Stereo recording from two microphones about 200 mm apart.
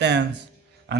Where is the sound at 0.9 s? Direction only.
60° right (ahead or behind).